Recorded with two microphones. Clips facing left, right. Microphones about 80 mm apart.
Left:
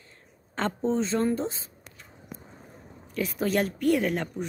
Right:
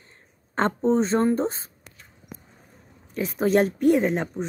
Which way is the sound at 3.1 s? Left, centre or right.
Right.